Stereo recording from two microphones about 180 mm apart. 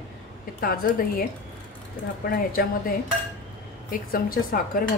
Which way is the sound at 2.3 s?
55° left (ahead or behind).